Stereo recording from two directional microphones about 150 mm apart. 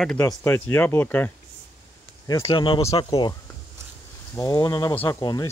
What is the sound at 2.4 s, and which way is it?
Speech, 35° left (ahead or behind).